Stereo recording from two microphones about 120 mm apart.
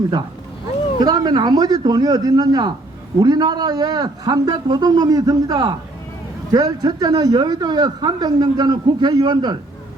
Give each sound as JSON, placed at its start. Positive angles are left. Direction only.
{"t": 0.9, "sound": "a man's voice", "side_deg": -35}